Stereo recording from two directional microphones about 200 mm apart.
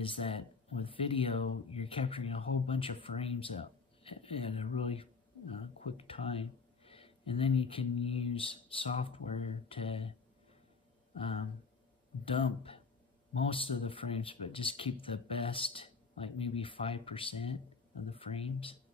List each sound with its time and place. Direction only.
0.0 s speech: 25° left (ahead or behind)
11.1 s speech: 30° left (ahead or behind)